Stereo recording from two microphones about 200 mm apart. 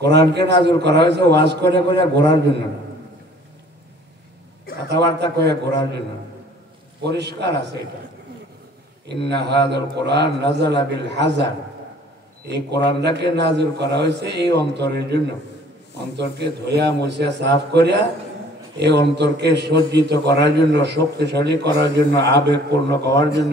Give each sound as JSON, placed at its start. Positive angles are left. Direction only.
{"t": 0.3, "sound": "a man's voice", "side_deg": -55}
{"t": 4.8, "sound": "a man's voice", "side_deg": -60}
{"t": 7.0, "sound": "a man's voice", "side_deg": -55}
{"t": 9.1, "sound": "a man's voice", "side_deg": -60}